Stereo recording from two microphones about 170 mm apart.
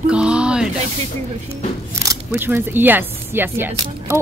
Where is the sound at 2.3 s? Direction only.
15° right (ahead or behind).